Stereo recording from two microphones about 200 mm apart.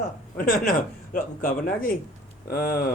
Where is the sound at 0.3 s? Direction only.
45° left (ahead or behind).